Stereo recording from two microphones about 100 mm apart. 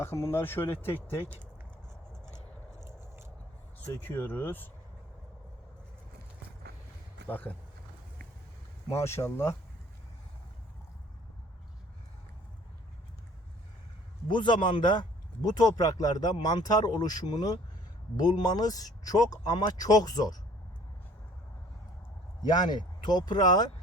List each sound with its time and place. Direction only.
0.0 s speech: 25° left (ahead or behind)
2.8 s biting: 25° right (ahead or behind)
3.8 s speech: 20° left (ahead or behind)
7.3 s speech: 20° left (ahead or behind)
8.9 s speech: 25° left (ahead or behind)
14.3 s speech: 50° left (ahead or behind)
22.4 s speech: 40° left (ahead or behind)